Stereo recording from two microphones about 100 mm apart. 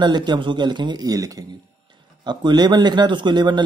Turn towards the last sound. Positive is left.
turn(degrees=-50)  # may be behind; listen again after turning